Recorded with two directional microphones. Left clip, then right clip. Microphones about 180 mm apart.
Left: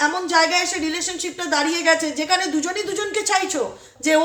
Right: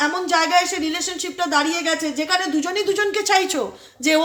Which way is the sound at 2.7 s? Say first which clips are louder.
Right 4 dB; 35° right (ahead or behind).